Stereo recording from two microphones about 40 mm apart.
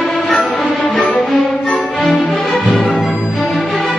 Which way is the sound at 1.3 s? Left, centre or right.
Left.